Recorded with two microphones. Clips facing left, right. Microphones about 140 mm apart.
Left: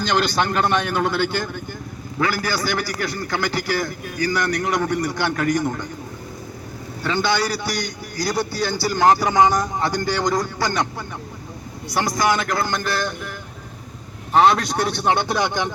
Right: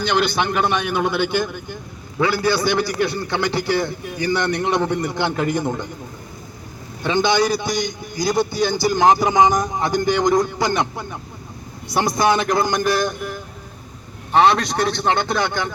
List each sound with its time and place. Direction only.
0.0 s a man's voice: 10° right (ahead or behind)
7.0 s a man's voice: 20° right (ahead or behind)
14.3 s a man's voice: centre (ahead or behind)